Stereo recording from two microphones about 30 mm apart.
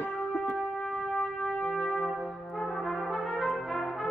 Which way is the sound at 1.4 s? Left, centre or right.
Centre.